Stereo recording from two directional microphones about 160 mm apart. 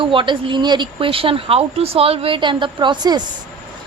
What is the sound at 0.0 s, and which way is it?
Speech, 30° right (ahead or behind).